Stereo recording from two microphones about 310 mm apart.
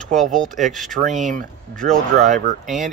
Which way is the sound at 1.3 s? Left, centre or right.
Right.